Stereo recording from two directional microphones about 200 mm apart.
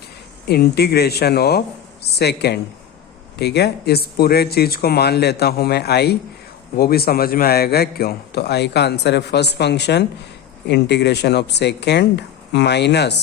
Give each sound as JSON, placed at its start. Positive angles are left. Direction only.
{"t": 0.4, "sound": "a man's voice", "side_deg": 55}